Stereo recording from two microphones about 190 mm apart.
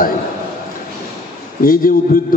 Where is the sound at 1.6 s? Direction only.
50° left (ahead or behind).